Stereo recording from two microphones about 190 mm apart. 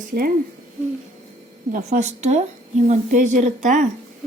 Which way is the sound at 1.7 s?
40° right (ahead or behind).